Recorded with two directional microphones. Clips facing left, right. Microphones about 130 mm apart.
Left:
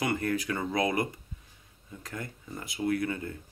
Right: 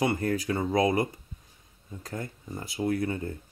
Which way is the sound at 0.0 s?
30° right (ahead or behind).